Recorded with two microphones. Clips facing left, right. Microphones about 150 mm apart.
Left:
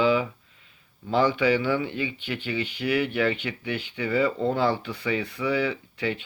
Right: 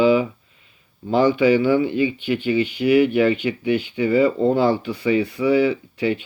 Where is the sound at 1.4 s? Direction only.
10° right (ahead or behind).